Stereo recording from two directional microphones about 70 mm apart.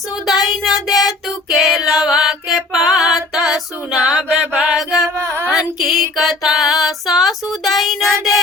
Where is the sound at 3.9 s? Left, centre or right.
Centre.